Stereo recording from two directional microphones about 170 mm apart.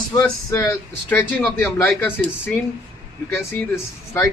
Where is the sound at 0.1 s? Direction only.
20° left (ahead or behind).